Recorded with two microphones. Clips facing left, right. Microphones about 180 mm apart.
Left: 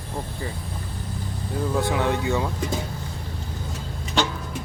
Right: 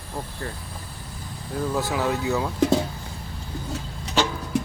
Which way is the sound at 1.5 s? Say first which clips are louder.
Left 1 dB; centre (ahead or behind).